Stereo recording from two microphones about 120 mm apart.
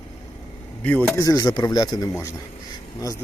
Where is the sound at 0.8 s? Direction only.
15° left (ahead or behind).